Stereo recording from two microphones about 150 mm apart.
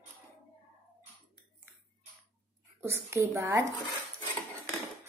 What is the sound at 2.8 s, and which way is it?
Speech, 15° right (ahead or behind).